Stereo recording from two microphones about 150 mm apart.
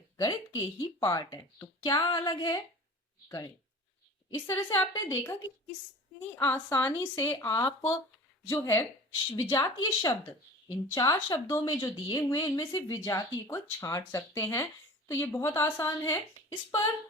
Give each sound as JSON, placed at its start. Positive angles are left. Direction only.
{"t": 0.2, "sound": "a woman's voice", "side_deg": 20}